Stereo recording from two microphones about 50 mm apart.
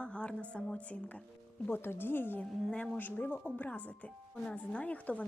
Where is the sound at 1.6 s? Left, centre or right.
Left.